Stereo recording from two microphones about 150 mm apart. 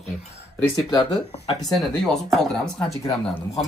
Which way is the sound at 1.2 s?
45° left (ahead or behind).